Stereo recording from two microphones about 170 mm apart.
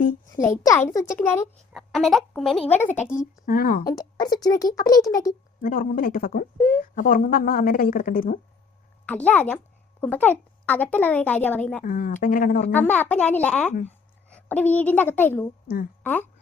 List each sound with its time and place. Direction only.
0.3 s a child's voice: 15° left (ahead or behind)
1.7 s a woman's voice: centre (ahead or behind)
3.4 s speech: 55° left (ahead or behind)
3.8 s a child's voice: 25° left (ahead or behind)
5.6 s a woman's voice: 55° left (ahead or behind)
9.0 s a child's voice: 10° left (ahead or behind)
11.8 s speech: 55° left (ahead or behind)
12.7 s a child's voice: 10° left (ahead or behind)